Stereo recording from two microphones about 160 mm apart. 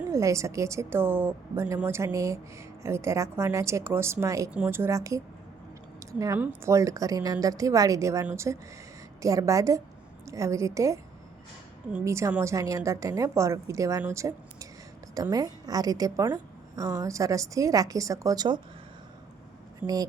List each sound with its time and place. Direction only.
0.1 s a woman's voice: 20° right (ahead or behind)
19.8 s a woman's voice: 10° right (ahead or behind)